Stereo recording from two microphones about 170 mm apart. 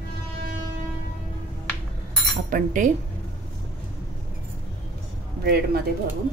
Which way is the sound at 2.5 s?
50° right (ahead or behind).